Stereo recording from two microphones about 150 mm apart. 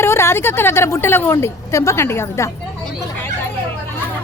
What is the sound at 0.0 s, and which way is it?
A woman's voice, 15° left (ahead or behind).